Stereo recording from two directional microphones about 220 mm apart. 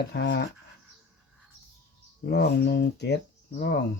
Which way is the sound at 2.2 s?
45° left (ahead or behind).